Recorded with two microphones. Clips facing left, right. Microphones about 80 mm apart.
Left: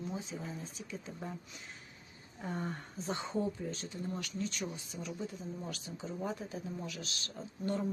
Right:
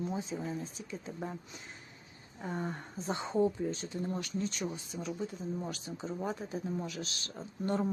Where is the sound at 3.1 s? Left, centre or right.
Right.